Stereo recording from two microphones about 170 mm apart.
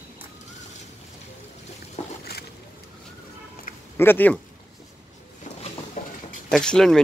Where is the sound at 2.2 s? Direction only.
70° left (ahead or behind).